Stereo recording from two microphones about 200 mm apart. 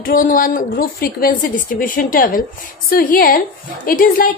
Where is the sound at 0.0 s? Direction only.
45° left (ahead or behind).